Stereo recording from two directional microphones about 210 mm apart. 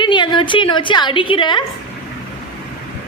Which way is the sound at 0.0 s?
20° left (ahead or behind).